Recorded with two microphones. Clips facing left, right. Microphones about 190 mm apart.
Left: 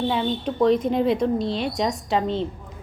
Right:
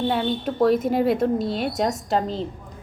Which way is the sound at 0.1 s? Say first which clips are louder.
Right 1 dB; 5° right (ahead or behind).